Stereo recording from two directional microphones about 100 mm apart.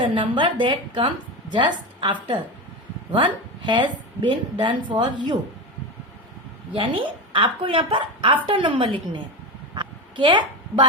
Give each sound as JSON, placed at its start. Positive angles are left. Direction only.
{"t": 0.0, "sound": "a woman's voice", "side_deg": -55}
{"t": 6.7, "sound": "a woman's voice", "side_deg": -55}
{"t": 9.7, "sound": "a sound", "side_deg": -55}